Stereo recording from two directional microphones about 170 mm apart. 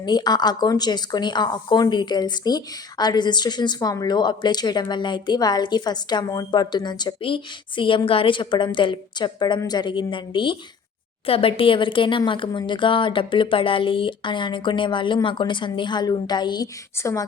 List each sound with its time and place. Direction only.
0.0 s speech: 25° left (ahead or behind)